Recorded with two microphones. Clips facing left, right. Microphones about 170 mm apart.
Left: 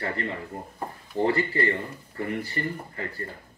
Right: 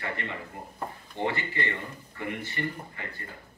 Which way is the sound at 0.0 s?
35° left (ahead or behind).